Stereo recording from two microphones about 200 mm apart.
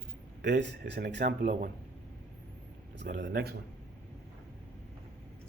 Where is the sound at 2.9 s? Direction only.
55° right (ahead or behind).